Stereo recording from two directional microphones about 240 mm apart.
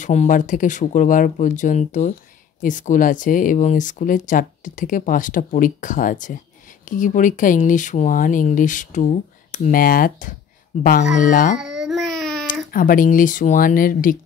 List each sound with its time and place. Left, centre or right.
0.0 s speech: left
11.8 s child singing: centre
12.7 s speech: left